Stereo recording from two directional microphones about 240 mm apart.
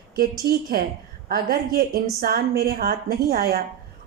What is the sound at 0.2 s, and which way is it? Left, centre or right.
Speech, right.